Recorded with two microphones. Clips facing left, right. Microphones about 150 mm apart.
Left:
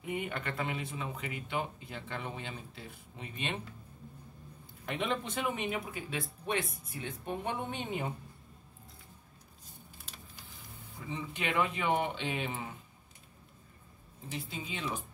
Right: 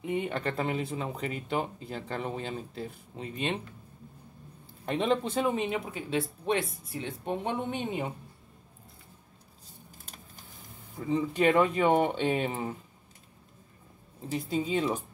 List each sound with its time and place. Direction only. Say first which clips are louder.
0.0 s speech: right 6 dB; 25° right (ahead or behind)
4.8 s speech: right 7 dB; 30° right (ahead or behind)
10.0 s a sound: right 2 dB; 45° right (ahead or behind)
11.0 s speech: right 12 dB; 40° right (ahead or behind)
14.3 s speech: right 12 dB; 40° right (ahead or behind)